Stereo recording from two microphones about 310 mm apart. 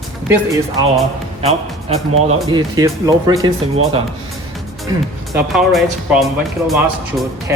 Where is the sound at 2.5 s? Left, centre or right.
Centre.